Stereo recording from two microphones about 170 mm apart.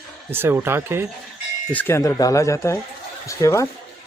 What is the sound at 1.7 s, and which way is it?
Speech, 10° left (ahead or behind).